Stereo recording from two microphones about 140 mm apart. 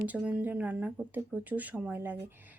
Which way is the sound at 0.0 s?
10° right (ahead or behind).